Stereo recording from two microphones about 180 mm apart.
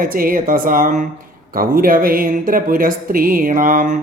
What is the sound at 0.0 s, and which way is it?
Speech, 50° right (ahead or behind).